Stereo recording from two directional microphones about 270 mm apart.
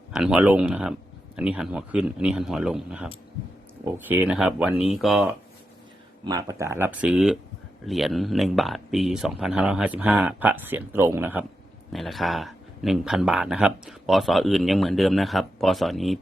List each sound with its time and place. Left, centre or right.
0.1 s speech: centre
6.2 s speech: centre